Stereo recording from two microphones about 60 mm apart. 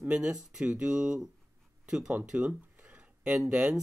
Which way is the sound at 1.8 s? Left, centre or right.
Centre.